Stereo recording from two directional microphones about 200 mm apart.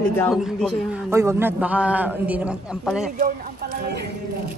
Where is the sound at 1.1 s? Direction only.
15° right (ahead or behind).